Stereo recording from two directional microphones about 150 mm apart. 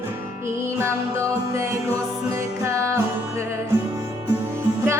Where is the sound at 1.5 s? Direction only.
20° right (ahead or behind).